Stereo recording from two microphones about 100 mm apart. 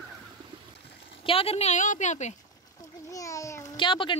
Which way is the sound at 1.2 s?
75° left (ahead or behind).